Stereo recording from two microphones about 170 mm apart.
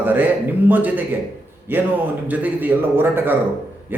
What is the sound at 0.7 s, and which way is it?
A man's voice, 10° right (ahead or behind).